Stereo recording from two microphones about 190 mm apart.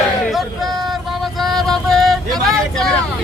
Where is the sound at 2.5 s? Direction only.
5° left (ahead or behind).